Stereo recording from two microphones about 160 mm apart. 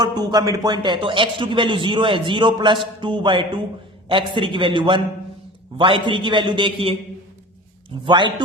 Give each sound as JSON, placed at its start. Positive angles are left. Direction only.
{"t": 0.0, "sound": "a man's voice", "side_deg": -25}
{"t": 3.0, "sound": "music", "side_deg": -30}
{"t": 4.1, "sound": "a man's voice", "side_deg": -30}